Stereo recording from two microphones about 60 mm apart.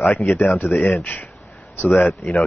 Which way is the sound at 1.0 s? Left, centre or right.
Left.